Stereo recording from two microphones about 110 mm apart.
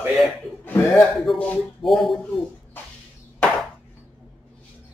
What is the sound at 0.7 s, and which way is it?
Speech, 20° left (ahead or behind).